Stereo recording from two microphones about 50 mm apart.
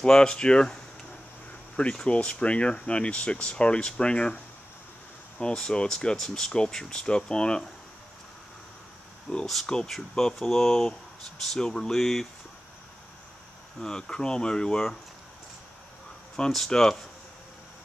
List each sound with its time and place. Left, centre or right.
0.0 s speech: centre
2.0 s speech: centre
5.4 s speech: centre
9.3 s speech: centre
13.7 s speech: centre
16.3 s speech: centre